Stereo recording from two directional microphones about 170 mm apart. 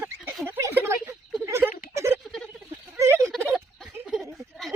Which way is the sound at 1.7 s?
50° left (ahead or behind).